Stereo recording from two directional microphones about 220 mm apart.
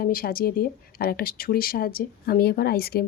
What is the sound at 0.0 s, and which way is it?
Speech, 40° left (ahead or behind).